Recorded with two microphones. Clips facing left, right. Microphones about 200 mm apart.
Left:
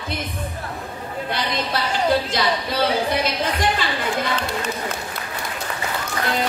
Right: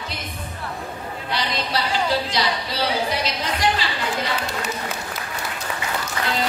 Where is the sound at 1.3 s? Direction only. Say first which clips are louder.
Even; 50° left (ahead or behind).